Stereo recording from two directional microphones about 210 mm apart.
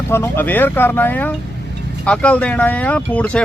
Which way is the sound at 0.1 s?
10° left (ahead or behind).